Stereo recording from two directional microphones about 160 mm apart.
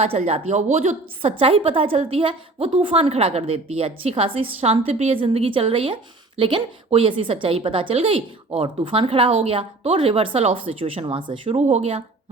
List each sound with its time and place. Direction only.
0.0 s a woman's voice: 40° right (ahead or behind)